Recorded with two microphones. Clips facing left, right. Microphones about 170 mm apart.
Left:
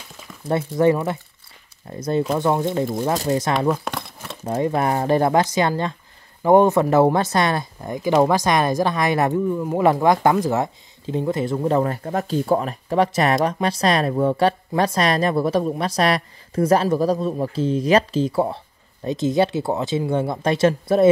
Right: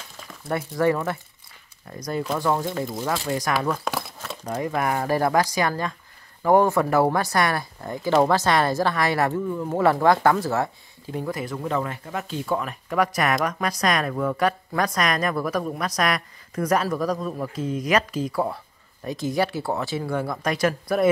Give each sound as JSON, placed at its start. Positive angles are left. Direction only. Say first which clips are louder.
{"t": 0.5, "sound": "speech", "louder": "left 4 dB", "side_deg": 25}
{"t": 3.9, "sound": "crumpling", "louder": "right 1 dB", "side_deg": 0}
{"t": 4.5, "sound": "speech", "louder": "left 5 dB", "side_deg": 30}